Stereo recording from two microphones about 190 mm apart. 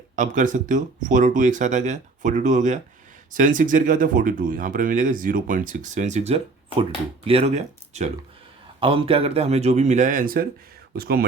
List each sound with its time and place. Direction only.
0.2 s speech: 40° right (ahead or behind)